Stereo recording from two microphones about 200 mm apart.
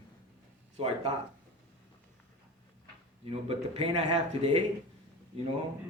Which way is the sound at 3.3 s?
30° right (ahead or behind).